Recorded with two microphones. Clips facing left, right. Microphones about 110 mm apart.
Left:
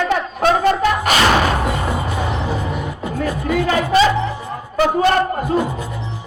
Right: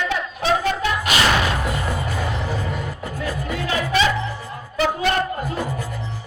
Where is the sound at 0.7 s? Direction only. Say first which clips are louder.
Left 5 dB; 50° left (ahead or behind).